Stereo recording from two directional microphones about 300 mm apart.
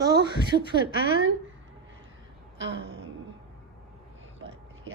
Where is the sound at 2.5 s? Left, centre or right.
Right.